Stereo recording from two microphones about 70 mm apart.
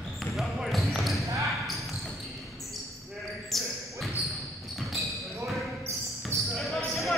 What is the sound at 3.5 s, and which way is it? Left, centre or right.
Basketball bounce, centre.